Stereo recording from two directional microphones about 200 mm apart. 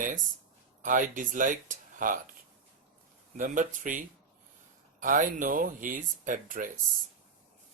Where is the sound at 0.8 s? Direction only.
40° right (ahead or behind).